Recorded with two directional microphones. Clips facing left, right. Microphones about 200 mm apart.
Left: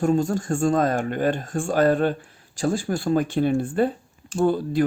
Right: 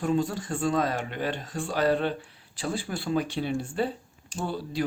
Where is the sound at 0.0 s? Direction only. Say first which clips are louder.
Left 5 dB; 45° left (ahead or behind).